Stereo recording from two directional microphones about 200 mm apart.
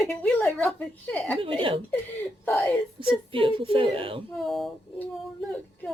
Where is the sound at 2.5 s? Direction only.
10° left (ahead or behind).